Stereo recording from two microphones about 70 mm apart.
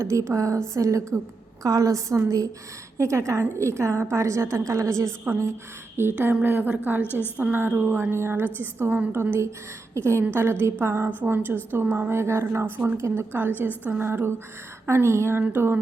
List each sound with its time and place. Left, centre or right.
0.0 s a woman's voice: right
6.0 s a woman's voice: right
14.1 s a woman's voice: right